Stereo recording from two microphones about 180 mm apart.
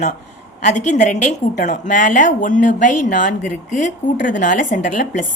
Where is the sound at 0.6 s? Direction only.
40° left (ahead or behind).